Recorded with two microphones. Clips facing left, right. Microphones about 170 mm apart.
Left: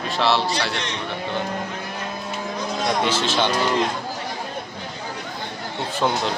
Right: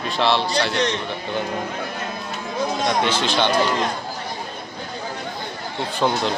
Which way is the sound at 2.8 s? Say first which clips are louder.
Left 1 dB; 5° left (ahead or behind).